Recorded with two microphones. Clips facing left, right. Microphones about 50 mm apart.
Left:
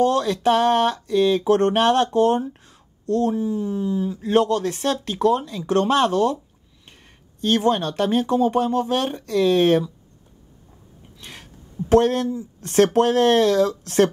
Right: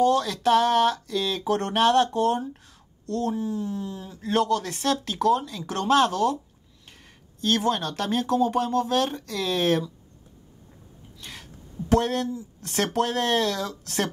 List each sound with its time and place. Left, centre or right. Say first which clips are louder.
0.2 s speech: left 3 dB; left
2.1 s speech: left 5 dB; left
2.5 s a sound: even; left
3.3 s speech: left 5 dB; left; by 9.8 s centre
11.1 s a sound: left 1 dB; centre
11.9 s speech: left 6 dB; centre